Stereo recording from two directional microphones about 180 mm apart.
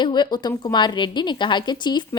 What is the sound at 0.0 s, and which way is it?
A woman's voice, 25° left (ahead or behind).